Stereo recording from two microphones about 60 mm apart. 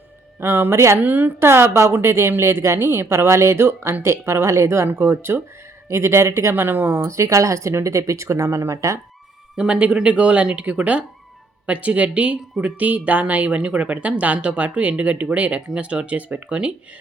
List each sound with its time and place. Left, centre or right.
0.3 s speech: right
0.9 s speech: right
1.4 s speech: right
9.6 s speech: right